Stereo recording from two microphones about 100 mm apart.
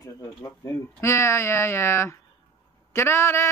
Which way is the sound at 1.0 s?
25° left (ahead or behind).